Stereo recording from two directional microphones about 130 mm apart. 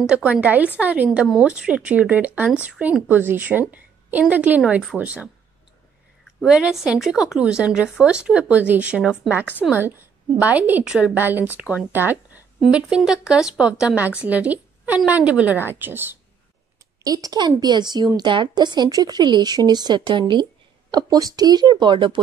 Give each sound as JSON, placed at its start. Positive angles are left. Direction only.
{"t": 0.0, "sound": "speech", "side_deg": -10}
{"t": 6.4, "sound": "a woman's voice", "side_deg": -5}
{"t": 12.5, "sound": "speech", "side_deg": -5}
{"t": 17.0, "sound": "speech", "side_deg": -30}